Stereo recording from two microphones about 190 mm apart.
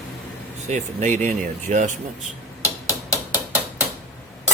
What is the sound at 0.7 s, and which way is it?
Speech, 40° right (ahead or behind).